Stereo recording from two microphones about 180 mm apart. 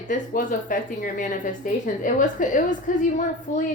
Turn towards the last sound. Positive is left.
turn(degrees=45)  # may be behind; listen again after turning